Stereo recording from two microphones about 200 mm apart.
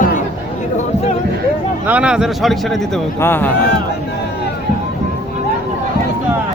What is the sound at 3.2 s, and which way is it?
Speech, 10° left (ahead or behind).